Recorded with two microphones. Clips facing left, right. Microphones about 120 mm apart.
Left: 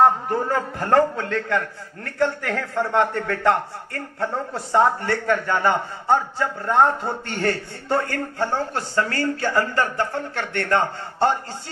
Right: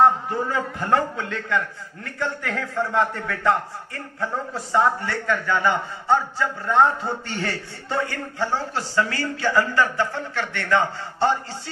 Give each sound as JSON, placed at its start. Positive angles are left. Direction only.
{"t": 0.0, "sound": "a man's voice", "side_deg": 50}
{"t": 2.0, "sound": "a man's voice", "side_deg": 60}